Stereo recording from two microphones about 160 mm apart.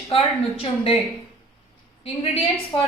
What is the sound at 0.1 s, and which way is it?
Speech, 35° left (ahead or behind).